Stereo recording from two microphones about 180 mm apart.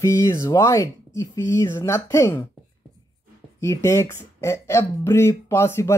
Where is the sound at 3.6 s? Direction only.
15° left (ahead or behind).